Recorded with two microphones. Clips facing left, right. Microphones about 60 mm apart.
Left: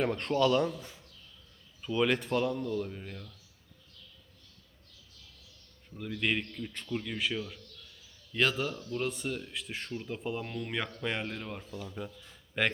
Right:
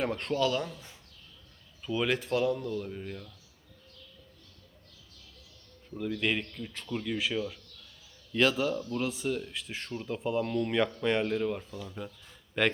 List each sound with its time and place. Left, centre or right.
0.0 s speech: centre
6.0 s speech: centre